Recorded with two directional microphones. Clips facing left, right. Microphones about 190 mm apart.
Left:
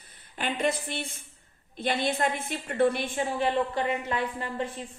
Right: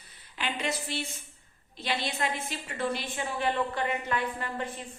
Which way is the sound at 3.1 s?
30° left (ahead or behind).